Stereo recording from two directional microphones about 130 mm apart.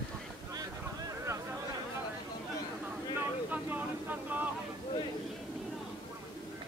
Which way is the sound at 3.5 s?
10° right (ahead or behind).